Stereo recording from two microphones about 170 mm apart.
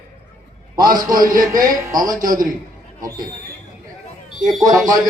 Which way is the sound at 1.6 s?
20° right (ahead or behind).